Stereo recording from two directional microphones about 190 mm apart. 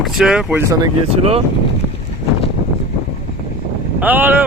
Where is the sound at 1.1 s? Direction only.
30° right (ahead or behind).